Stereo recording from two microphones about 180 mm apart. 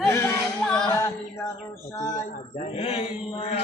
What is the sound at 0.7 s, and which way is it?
A capella, 10° left (ahead or behind).